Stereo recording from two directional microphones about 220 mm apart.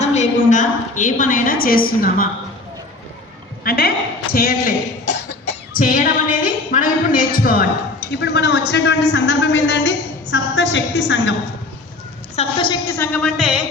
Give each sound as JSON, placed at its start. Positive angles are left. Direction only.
{"t": 0.0, "sound": "a woman's voice", "side_deg": 30}
{"t": 3.6, "sound": "a man's voice", "side_deg": 45}
{"t": 8.2, "sound": "a man's voice", "side_deg": 50}
{"t": 12.4, "sound": "a woman's voice", "side_deg": 20}
{"t": 13.0, "sound": "speech", "side_deg": 5}